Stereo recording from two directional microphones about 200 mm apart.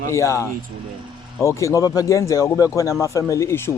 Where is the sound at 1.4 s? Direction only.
15° left (ahead or behind).